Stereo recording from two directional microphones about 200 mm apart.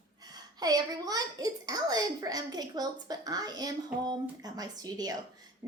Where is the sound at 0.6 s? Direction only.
20° right (ahead or behind).